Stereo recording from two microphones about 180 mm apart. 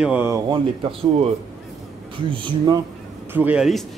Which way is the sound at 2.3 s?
20° right (ahead or behind).